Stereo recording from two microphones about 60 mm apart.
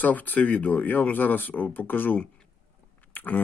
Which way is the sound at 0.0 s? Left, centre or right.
Left.